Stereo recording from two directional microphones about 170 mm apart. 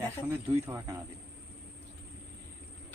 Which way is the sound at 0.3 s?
15° right (ahead or behind).